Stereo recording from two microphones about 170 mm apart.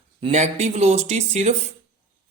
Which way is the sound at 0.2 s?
40° right (ahead or behind).